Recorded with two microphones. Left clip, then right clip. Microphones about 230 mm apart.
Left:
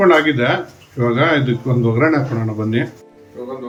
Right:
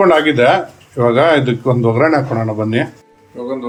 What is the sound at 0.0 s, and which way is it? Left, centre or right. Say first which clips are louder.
Speech: right 3 dB; right.